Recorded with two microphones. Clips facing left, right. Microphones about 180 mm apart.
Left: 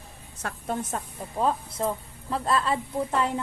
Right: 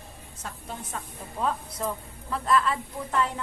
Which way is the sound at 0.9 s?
30° left (ahead or behind).